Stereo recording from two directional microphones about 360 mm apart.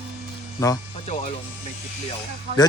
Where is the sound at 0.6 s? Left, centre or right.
Centre.